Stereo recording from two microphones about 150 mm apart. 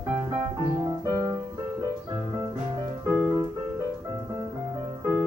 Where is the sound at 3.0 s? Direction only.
10° right (ahead or behind).